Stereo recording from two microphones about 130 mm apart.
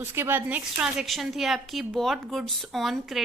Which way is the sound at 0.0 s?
15° right (ahead or behind).